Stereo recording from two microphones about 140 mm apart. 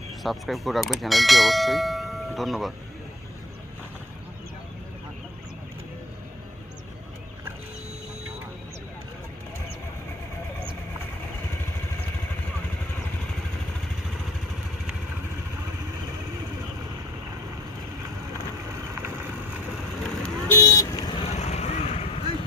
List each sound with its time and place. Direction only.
0.2 s speech: centre (ahead or behind)
18.9 s vehicle: 15° right (ahead or behind)
20.1 s vehicle: 15° left (ahead or behind)
21.2 s vehicle: 50° left (ahead or behind)